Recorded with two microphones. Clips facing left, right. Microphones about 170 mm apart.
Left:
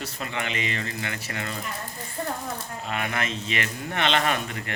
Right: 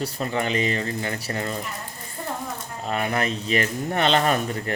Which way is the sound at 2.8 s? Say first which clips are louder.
Right 5 dB; 35° right (ahead or behind).